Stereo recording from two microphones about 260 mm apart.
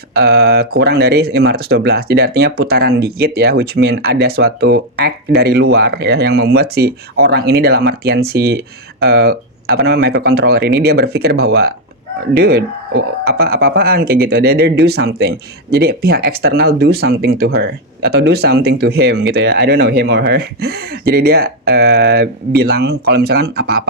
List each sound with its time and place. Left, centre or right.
0.1 s speech: right